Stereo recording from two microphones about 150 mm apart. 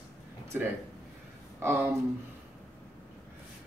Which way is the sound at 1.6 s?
15° right (ahead or behind).